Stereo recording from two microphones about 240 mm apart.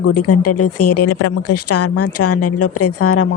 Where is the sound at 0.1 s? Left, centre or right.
Left.